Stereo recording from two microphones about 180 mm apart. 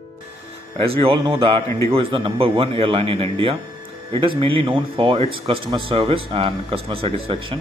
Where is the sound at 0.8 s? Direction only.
30° right (ahead or behind).